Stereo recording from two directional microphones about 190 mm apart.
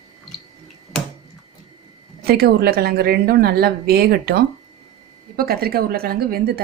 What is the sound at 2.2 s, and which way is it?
A woman's voice, 55° right (ahead or behind).